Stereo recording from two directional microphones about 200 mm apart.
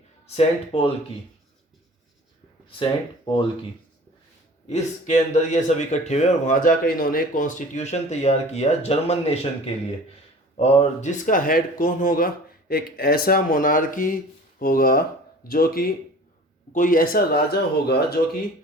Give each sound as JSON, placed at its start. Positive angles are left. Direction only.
{"t": 0.3, "sound": "speech", "side_deg": 30}
{"t": 2.6, "sound": "speech", "side_deg": 25}
{"t": 4.7, "sound": "speech", "side_deg": 35}
{"t": 10.6, "sound": "speech", "side_deg": 35}